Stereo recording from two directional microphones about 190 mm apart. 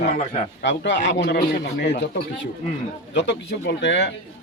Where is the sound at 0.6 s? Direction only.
70° left (ahead or behind).